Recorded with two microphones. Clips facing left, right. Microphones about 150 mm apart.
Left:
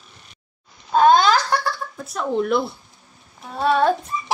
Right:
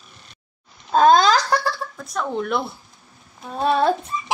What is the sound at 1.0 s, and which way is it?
Speech, 40° right (ahead or behind).